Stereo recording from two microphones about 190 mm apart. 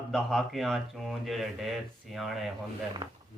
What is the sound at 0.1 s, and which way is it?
Speech, centre (ahead or behind).